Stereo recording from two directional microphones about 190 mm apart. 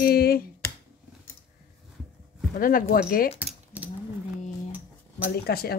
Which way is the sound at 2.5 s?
45° left (ahead or behind).